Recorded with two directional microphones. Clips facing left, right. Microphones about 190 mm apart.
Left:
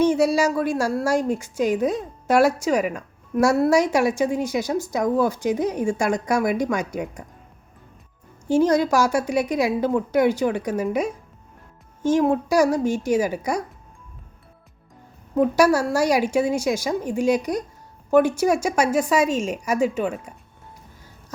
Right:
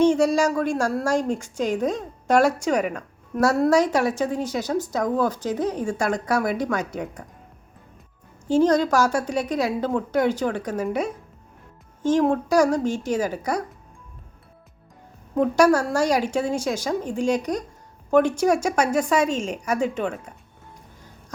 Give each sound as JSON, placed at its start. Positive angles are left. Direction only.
{"t": 0.0, "sound": "a woman's voice", "side_deg": 5}
{"t": 8.4, "sound": "a woman's voice", "side_deg": 10}
{"t": 15.4, "sound": "a woman's voice", "side_deg": 10}